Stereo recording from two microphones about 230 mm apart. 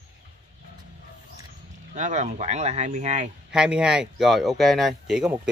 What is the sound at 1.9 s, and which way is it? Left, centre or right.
Speech, right.